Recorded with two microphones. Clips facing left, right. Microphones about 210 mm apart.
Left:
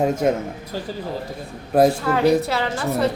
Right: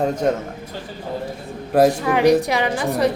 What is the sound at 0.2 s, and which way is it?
Speech, 10° left (ahead or behind).